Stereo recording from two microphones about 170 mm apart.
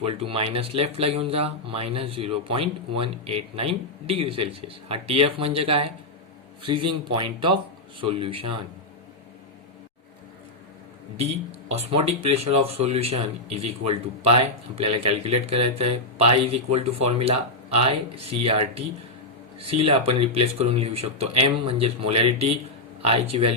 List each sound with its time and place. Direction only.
0.0 s speech: 35° right (ahead or behind)
11.7 s speech: 35° right (ahead or behind)